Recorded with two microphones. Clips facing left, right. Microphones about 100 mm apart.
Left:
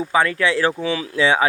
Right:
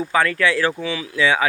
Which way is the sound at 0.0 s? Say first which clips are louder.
Even; 20° left (ahead or behind).